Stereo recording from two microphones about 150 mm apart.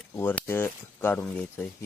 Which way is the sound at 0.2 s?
15° left (ahead or behind).